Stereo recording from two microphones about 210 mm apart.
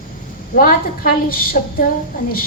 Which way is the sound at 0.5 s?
40° left (ahead or behind).